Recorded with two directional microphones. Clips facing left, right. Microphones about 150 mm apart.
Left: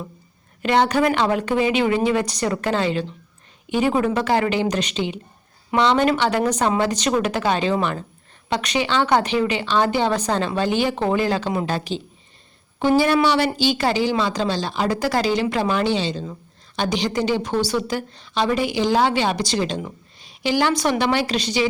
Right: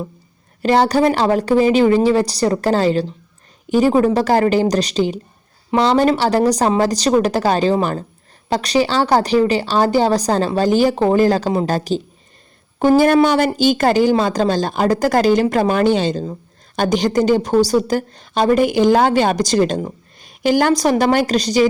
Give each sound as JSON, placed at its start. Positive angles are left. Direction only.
{"t": 0.6, "sound": "a woman's voice", "side_deg": -35}